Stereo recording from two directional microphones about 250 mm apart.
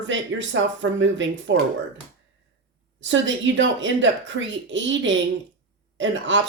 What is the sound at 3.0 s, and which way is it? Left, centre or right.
A woman's voice, right.